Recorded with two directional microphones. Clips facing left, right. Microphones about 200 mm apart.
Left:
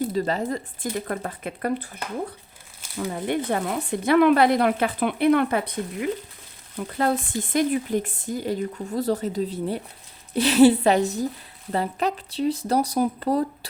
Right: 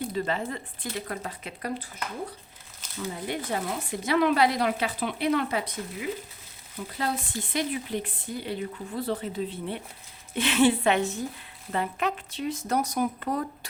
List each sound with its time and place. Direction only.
0.1 s speech: 40° left (ahead or behind)
3.1 s speech: 55° left (ahead or behind); by 13.7 s 35° left (ahead or behind)